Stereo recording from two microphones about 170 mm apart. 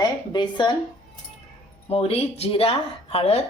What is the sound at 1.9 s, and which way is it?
Speech, 35° left (ahead or behind).